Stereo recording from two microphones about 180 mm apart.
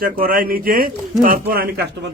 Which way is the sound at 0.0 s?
55° right (ahead or behind).